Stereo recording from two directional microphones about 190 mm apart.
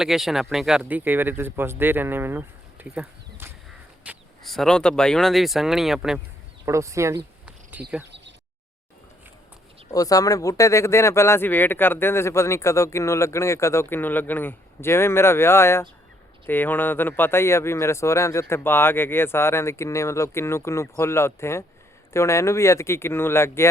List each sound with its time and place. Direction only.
0.0 s speech: centre (ahead or behind)
6.7 s speech: 15° right (ahead or behind)
7.4 s insect: 5° right (ahead or behind)
9.9 s speech: 20° left (ahead or behind)